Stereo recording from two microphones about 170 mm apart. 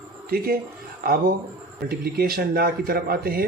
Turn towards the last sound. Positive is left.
turn(degrees=-60)  # may be behind; listen again after turning